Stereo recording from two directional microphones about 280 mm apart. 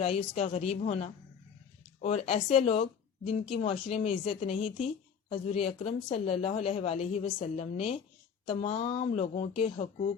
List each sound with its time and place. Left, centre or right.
0.0 s a woman's voice: left